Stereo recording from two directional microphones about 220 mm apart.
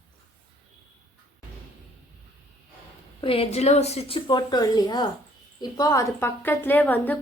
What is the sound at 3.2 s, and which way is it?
A woman's voice, 25° left (ahead or behind).